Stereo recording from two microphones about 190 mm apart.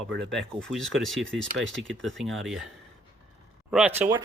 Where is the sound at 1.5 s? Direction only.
75° right (ahead or behind).